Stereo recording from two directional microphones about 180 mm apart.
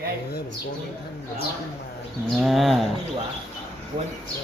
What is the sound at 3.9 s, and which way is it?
Speech, 25° right (ahead or behind).